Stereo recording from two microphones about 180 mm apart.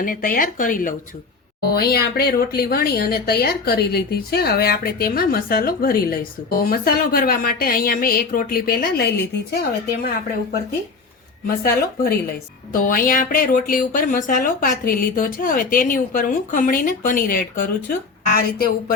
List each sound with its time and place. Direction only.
0.0 s a woman's voice: 50° left (ahead or behind)
1.6 s speech: 60° left (ahead or behind)
11.4 s a woman's voice: 55° left (ahead or behind)